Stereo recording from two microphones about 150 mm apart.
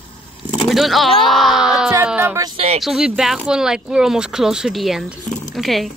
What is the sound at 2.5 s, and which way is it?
Speech, 45° right (ahead or behind).